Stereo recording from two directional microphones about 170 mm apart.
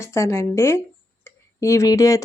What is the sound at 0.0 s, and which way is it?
Speech, 15° left (ahead or behind).